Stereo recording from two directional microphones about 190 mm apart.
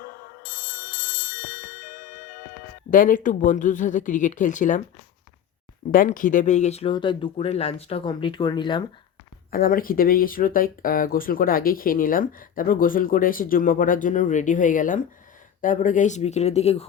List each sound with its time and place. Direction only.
0.0 s bell: 50° left (ahead or behind)
2.9 s speech: 45° left (ahead or behind)
5.9 s speech: 45° left (ahead or behind); by 8.8 s 25° left (ahead or behind)
9.5 s speech: 50° left (ahead or behind)